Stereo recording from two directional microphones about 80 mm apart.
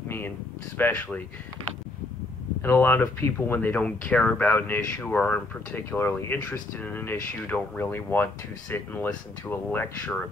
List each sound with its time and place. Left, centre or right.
0.7 s speech: left
2.6 s speech: left
3.8 s speech: centre
4.5 s speech: left
5.9 s speech: left